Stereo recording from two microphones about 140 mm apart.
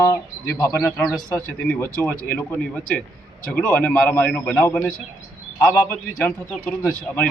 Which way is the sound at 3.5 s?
15° left (ahead or behind).